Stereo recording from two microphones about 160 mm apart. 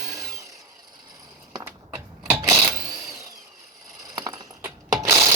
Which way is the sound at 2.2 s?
10° right (ahead or behind).